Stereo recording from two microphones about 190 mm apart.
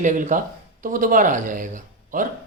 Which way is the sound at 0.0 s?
40° right (ahead or behind).